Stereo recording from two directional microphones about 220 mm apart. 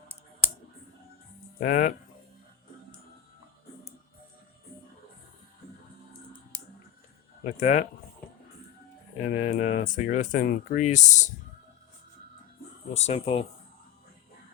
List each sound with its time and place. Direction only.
1.5 s speech: 35° left (ahead or behind)
7.6 s speech: 30° left (ahead or behind)
9.2 s speech: 35° left (ahead or behind)
12.9 s speech: 30° left (ahead or behind)